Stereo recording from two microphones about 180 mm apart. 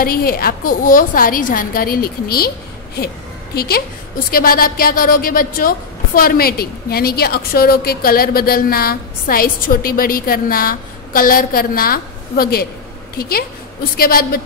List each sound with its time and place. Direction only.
0.0 s a woman's voice: 55° left (ahead or behind)
3.5 s a woman's voice: 60° left (ahead or behind)